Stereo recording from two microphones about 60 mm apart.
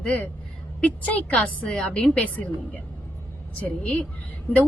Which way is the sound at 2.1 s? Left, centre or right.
Left.